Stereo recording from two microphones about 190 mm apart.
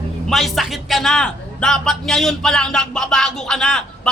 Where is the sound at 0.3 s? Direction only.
Centre (ahead or behind).